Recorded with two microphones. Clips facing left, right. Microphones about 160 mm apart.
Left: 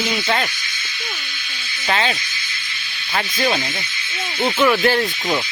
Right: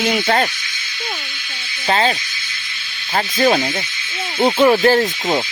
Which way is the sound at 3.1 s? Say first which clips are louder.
Right 5 dB; 40° right (ahead or behind).